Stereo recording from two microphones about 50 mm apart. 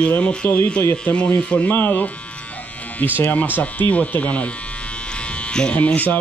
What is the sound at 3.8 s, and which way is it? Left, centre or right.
Speech, left.